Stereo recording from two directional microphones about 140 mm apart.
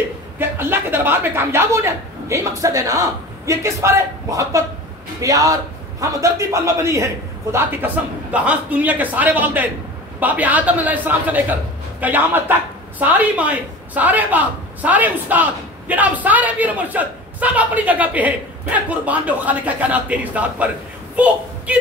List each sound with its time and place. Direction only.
0.4 s a woman's voice: 15° right (ahead or behind)